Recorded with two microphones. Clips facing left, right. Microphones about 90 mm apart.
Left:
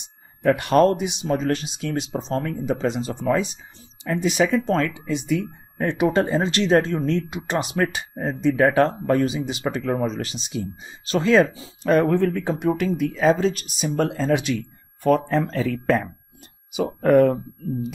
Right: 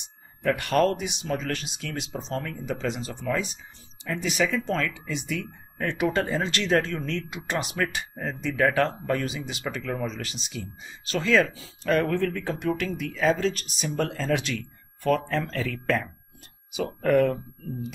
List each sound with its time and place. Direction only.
0.4 s speech: 20° left (ahead or behind)